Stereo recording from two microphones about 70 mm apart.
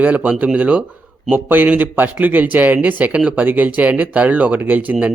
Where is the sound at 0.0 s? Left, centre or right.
Right.